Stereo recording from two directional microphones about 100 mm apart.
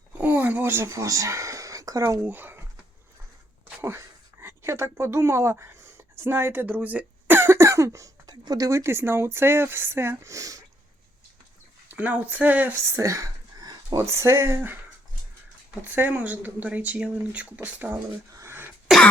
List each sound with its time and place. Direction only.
0.1 s a sound: 20° right (ahead or behind); by 2.2 s 35° right (ahead or behind)
2.2 s speech: 20° right (ahead or behind)
3.8 s speech: 25° right (ahead or behind)
11.9 s speech: 15° right (ahead or behind)
13.0 s speech: 30° right (ahead or behind)
16.0 s speech: 15° right (ahead or behind)
18.3 s cough: 25° right (ahead or behind)
18.9 s cough: centre (ahead or behind)